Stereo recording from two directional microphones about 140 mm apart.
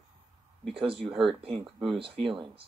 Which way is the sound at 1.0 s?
Centre (ahead or behind).